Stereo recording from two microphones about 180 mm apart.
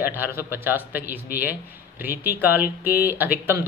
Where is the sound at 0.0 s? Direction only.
10° right (ahead or behind).